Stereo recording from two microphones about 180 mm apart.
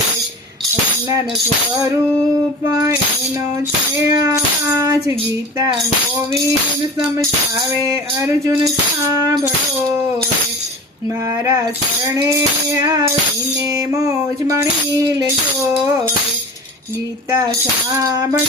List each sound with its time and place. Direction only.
2.6 s music: 20° right (ahead or behind)
4.1 s music: 20° right (ahead or behind)
8.4 s music: 20° right (ahead or behind)
12.7 s music: 20° right (ahead or behind)
17.9 s music: 20° right (ahead or behind)